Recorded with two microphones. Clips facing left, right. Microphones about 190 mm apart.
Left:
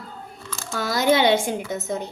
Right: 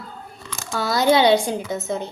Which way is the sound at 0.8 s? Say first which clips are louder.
Right 2 dB; 20° left (ahead or behind).